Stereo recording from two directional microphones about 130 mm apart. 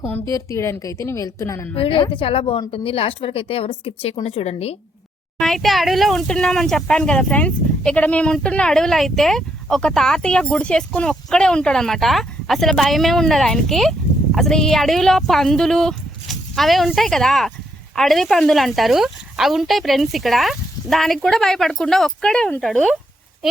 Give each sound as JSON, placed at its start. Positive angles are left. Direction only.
{"t": 0.0, "sound": "a woman's voice", "side_deg": 20}
{"t": 1.7, "sound": "speech", "side_deg": 45}
{"t": 5.4, "sound": "speech", "side_deg": 0}